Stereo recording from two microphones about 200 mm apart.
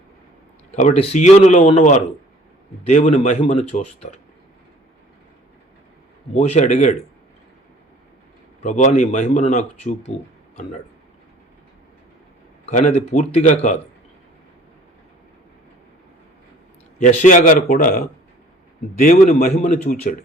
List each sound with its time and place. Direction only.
0.7 s speech: 35° left (ahead or behind)
6.3 s speech: 35° left (ahead or behind)
8.6 s speech: 35° left (ahead or behind)
12.6 s speech: 35° left (ahead or behind)
17.0 s a man's voice: 40° left (ahead or behind)